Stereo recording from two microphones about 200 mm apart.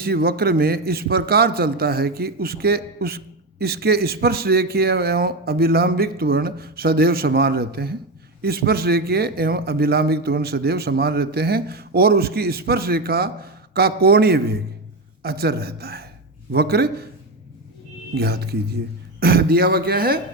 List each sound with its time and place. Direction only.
0.0 s a man's voice: 50° right (ahead or behind)
18.1 s a man's voice: 55° right (ahead or behind)